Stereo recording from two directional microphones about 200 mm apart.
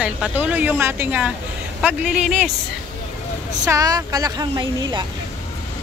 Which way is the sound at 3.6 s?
15° right (ahead or behind).